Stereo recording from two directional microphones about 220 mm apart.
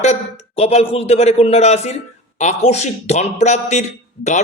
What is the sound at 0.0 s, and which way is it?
A man's voice, 30° left (ahead or behind).